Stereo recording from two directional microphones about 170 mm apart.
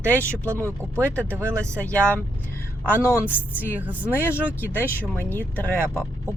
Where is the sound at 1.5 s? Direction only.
15° right (ahead or behind).